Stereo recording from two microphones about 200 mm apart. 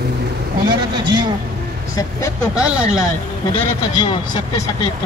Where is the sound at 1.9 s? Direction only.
15° left (ahead or behind).